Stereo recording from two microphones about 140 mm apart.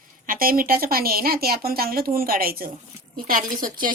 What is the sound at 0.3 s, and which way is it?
Speech, 90° right.